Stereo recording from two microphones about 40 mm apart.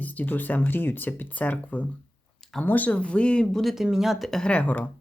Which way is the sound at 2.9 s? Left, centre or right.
Left.